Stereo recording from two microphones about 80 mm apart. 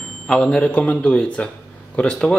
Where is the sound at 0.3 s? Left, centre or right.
Centre.